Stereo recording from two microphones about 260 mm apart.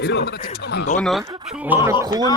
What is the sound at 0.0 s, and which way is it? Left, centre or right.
Speech, left.